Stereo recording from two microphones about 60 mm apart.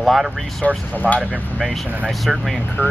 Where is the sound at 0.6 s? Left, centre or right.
Centre.